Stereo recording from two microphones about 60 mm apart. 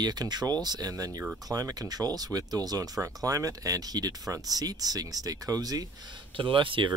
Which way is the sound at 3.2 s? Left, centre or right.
Right.